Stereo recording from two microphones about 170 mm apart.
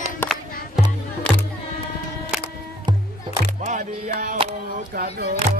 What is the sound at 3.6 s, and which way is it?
Music, 50° right (ahead or behind).